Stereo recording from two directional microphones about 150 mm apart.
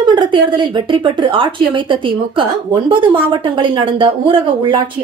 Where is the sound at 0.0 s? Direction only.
30° right (ahead or behind).